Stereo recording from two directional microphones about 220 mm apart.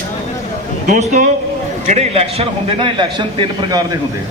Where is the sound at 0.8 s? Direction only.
35° right (ahead or behind); by 4.0 s 20° right (ahead or behind).